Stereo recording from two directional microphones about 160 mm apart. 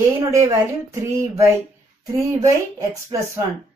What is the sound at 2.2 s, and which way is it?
Speech, 20° right (ahead or behind).